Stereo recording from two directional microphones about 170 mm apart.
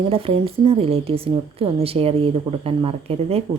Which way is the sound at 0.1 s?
35° right (ahead or behind).